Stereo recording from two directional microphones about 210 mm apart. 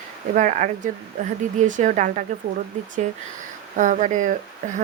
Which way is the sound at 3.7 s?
35° right (ahead or behind).